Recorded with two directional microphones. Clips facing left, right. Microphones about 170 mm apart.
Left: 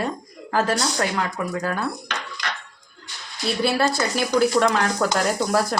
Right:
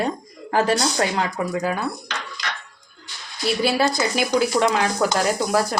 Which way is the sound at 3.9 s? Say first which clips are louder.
Right 1 dB; 15° right (ahead or behind).